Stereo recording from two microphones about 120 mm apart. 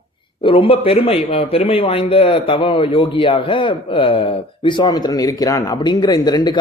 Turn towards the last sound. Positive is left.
turn(degrees=35)  # may be behind; listen again after turning